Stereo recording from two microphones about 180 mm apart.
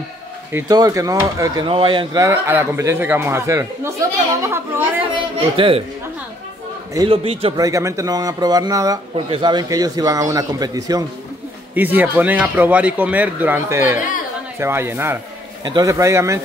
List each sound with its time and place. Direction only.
0.5 s a man's voice: 10° right (ahead or behind); by 2.2 s 25° right (ahead or behind)
2.2 s speech: 15° right (ahead or behind)
5.1 s a man's voice: 30° right (ahead or behind)
7.1 s a man's voice: 30° right (ahead or behind)
7.6 s a man's voice: 15° right (ahead or behind)
11.7 s speech: 10° right (ahead or behind)